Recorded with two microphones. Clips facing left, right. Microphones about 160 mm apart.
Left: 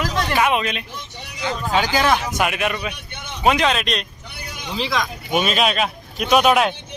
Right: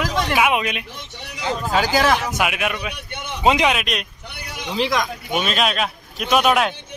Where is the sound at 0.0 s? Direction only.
10° right (ahead or behind).